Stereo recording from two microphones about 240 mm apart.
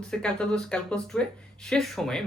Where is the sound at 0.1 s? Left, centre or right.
Centre.